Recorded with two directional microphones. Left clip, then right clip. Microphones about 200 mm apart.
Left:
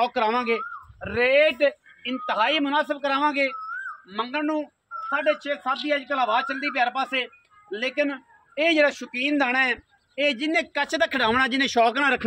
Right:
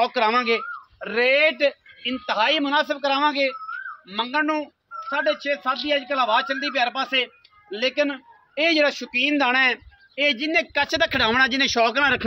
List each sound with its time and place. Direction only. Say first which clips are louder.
0.0 s speech: right 3 dB; 30° right (ahead or behind)
0.9 s speech: even; 55° right (ahead or behind); by 12.3 s 30° right (ahead or behind)